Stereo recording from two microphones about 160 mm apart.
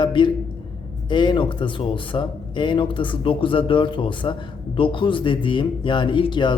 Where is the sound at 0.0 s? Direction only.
30° left (ahead or behind).